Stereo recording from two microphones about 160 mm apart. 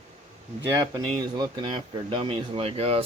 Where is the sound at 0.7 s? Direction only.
20° right (ahead or behind); by 3.0 s 40° right (ahead or behind).